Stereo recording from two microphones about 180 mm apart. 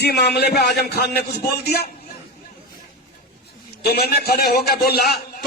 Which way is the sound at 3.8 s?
60° left (ahead or behind).